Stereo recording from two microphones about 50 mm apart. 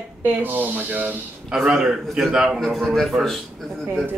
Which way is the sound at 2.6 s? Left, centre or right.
Centre.